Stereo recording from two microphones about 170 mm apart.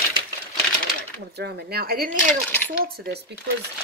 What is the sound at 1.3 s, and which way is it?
Speech, 75° right (ahead or behind).